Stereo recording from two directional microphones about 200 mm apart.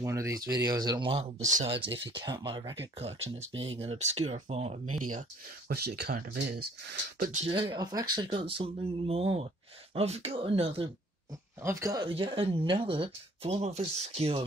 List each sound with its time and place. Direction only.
0.0 s speech: 15° right (ahead or behind); by 4.8 s 30° right (ahead or behind)
5.7 s speech: 50° right (ahead or behind)
7.4 s speech: 25° right (ahead or behind)
11.6 s speech: 15° right (ahead or behind)
12.1 s speech: 30° right (ahead or behind)